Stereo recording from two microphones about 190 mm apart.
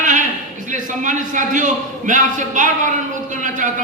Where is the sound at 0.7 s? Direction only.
40° right (ahead or behind).